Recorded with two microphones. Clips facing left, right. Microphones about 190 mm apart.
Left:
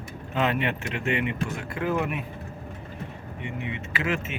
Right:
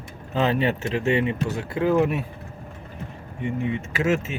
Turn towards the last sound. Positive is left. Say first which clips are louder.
# right 6 dB
turn(degrees=-45)  # may be behind; listen again after turning